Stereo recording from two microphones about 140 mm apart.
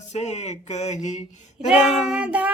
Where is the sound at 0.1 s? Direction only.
50° left (ahead or behind).